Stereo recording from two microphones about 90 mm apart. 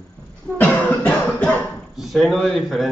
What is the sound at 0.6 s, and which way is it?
Cough, 15° left (ahead or behind).